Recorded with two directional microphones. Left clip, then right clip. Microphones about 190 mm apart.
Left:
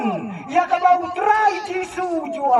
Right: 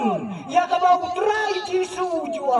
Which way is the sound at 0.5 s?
40° right (ahead or behind).